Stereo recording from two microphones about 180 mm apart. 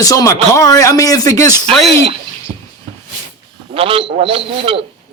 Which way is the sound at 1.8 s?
35° right (ahead or behind).